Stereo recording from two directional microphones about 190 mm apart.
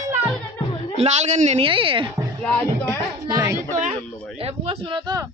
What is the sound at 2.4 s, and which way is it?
Speech, 10° left (ahead or behind).